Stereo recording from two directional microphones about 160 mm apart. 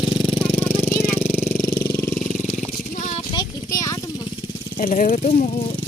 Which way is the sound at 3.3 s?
25° left (ahead or behind).